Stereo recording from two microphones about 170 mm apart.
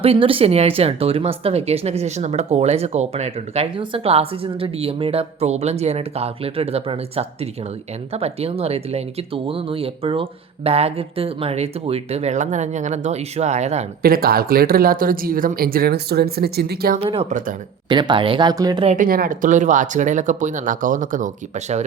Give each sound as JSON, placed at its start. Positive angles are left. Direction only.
{"t": 0.0, "sound": "speech", "side_deg": -35}
{"t": 14.0, "sound": "speech", "side_deg": -60}
{"t": 17.0, "sound": "speech", "side_deg": -35}
{"t": 18.9, "sound": "speech", "side_deg": -55}